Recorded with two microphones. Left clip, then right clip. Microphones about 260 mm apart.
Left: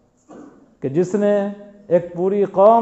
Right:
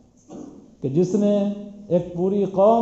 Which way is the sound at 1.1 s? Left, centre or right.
Left.